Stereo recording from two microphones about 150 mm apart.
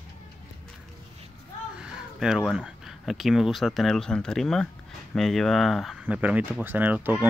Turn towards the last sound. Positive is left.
turn(degrees=-10)  # may be behind; listen again after turning